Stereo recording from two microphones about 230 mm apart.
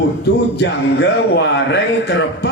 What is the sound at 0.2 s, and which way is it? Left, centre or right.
A man's voice, left.